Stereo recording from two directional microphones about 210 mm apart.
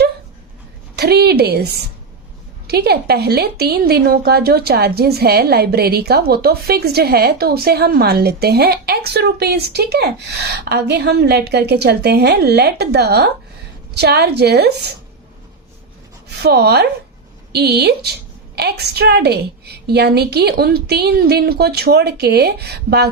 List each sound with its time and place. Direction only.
0.9 s a woman's voice: 50° right (ahead or behind)
16.4 s a woman's voice: 50° right (ahead or behind)